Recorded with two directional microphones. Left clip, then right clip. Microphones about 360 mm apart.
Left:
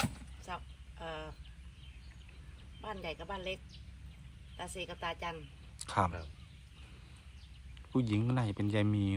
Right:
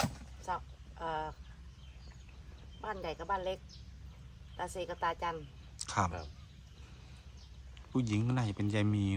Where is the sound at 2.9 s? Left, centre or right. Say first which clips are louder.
Right 2 dB; right.